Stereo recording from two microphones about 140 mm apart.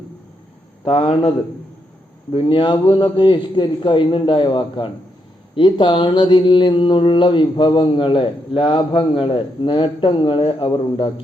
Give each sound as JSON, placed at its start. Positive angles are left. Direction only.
{"t": 0.9, "sound": "a man's voice", "side_deg": 45}
{"t": 2.3, "sound": "mantra", "side_deg": 35}